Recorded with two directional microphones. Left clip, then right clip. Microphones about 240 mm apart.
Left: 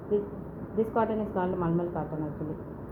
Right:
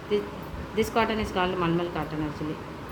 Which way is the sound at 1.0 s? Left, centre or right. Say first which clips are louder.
Right 4 dB; right.